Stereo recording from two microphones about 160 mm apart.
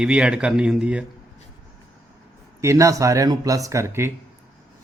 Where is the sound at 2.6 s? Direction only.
20° right (ahead or behind).